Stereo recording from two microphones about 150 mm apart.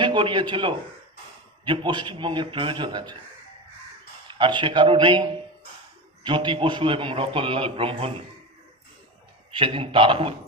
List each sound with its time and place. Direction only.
0.0 s a man's voice: 30° right (ahead or behind)
4.3 s a man's voice: 30° right (ahead or behind)
6.2 s a man's voice: 30° right (ahead or behind)
9.6 s a man's voice: 35° right (ahead or behind)